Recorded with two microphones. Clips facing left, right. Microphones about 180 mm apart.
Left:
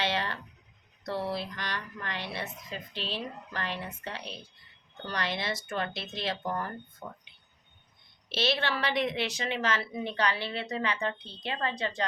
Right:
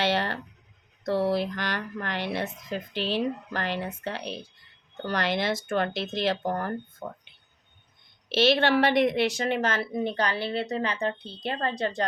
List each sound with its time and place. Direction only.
1.0 s mantra: 40° right (ahead or behind)
1.4 s mantra: 90° right
1.8 s a woman's voice: 55° right (ahead or behind)
2.7 s speech: 75° right (ahead or behind)
4.0 s speech: 75° right (ahead or behind)
5.6 s a woman's voice: 60° right (ahead or behind)
8.6 s speech: 65° right (ahead or behind)
9.0 s a woman's voice: 50° right (ahead or behind)